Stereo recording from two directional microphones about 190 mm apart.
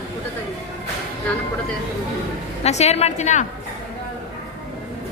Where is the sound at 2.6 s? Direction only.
35° left (ahead or behind).